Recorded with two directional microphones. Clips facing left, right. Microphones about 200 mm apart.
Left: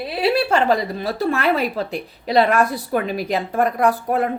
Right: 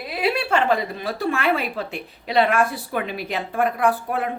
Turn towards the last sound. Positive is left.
turn(degrees=40)  # may be behind; listen again after turning